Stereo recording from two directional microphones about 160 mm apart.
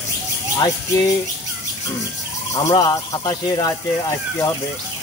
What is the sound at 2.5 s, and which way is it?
Speech, 25° left (ahead or behind).